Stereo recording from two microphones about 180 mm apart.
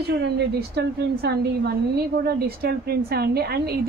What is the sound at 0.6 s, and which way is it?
A woman's voice, 60° right (ahead or behind).